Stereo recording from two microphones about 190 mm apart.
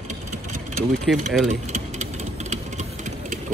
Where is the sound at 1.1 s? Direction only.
Centre (ahead or behind).